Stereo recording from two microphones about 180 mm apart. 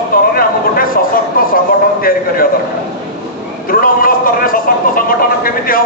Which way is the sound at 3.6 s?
55° left (ahead or behind).